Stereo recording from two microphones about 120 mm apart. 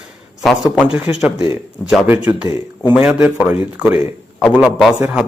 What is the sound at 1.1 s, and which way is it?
A man's voice, 15° right (ahead or behind).